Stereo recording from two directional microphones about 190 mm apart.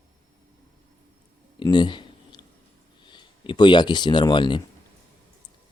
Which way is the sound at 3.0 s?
25° left (ahead or behind).